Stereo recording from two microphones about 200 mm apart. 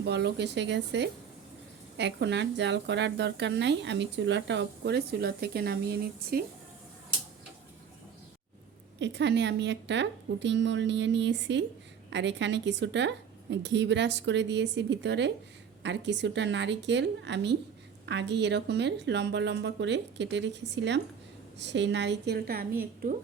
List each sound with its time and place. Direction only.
0.0 s speech: 55° right (ahead or behind)
9.0 s speech: 60° right (ahead or behind)